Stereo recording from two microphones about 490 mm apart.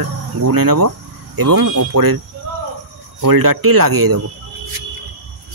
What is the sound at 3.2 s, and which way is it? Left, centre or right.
Speech, right.